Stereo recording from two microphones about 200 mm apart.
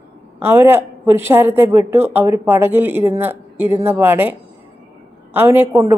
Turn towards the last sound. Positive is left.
turn(degrees=-10)  # may be behind; listen again after turning